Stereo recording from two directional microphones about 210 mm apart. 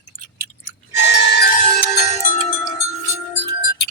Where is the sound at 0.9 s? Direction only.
55° left (ahead or behind).